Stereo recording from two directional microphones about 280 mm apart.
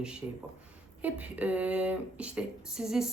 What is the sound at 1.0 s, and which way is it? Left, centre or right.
Speech, centre.